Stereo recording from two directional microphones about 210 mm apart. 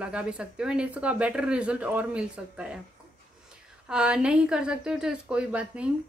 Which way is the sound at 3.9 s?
5° right (ahead or behind).